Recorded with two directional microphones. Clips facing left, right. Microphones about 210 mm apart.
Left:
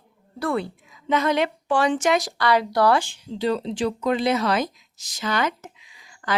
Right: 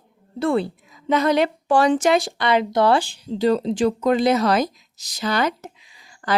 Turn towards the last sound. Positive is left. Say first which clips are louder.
# right 4 dB
turn(degrees=-35)  # may be behind; listen again after turning